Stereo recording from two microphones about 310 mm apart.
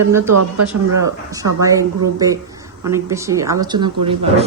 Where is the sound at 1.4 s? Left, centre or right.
Right.